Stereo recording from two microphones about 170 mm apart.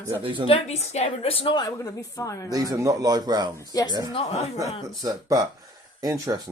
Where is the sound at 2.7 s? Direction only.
20° right (ahead or behind).